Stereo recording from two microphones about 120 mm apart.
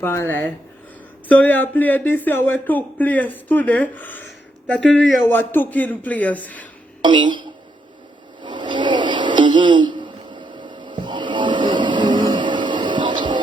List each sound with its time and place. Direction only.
0.0 s speech: 20° left (ahead or behind)
7.0 s a woman's voice: 40° right (ahead or behind)
8.4 s a sound: 40° right (ahead or behind)